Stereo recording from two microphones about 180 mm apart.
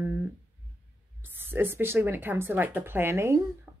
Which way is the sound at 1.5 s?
10° right (ahead or behind).